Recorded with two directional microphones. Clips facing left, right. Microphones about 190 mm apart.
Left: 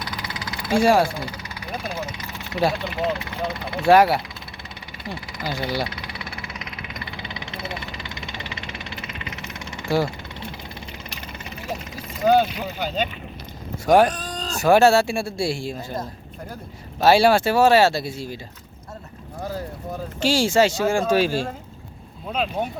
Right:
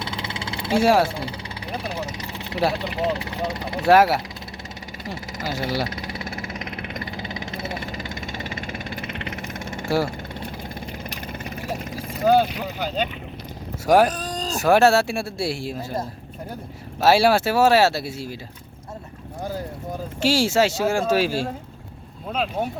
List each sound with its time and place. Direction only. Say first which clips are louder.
0.0 s vehicle: right 2 dB; 25° right (ahead or behind)
0.8 s speech: even; 5° right (ahead or behind)
1.0 s vehicle: even; 30° right (ahead or behind)
2.7 s speech: right 1 dB; 35° right (ahead or behind)
3.8 s speech: left 1 dB; 5° right (ahead or behind)
5.0 s speech: even; 45° right (ahead or behind)
5.6 s speech: right 1 dB; 5° right (ahead or behind)
5.9 s vehicle: right 4 dB; 45° right (ahead or behind)
11.3 s vehicle: right 4 dB; 55° right (ahead or behind)
12.2 s speech: even; 5° right (ahead or behind)
13.8 s speech: left 1 dB; 5° right (ahead or behind)
20.1 s speech: left 1 dB; 5° right (ahead or behind)